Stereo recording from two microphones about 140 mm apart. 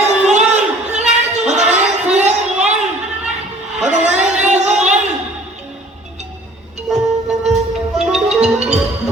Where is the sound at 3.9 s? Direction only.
55° right (ahead or behind).